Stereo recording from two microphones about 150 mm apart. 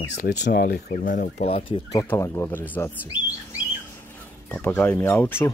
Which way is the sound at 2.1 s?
15° left (ahead or behind).